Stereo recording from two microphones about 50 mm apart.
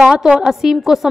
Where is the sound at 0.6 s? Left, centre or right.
Centre.